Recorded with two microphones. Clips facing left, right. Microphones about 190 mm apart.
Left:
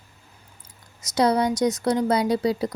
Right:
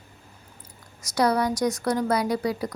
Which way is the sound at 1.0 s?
20° left (ahead or behind).